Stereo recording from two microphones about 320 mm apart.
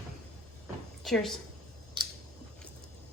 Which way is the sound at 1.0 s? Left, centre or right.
Centre.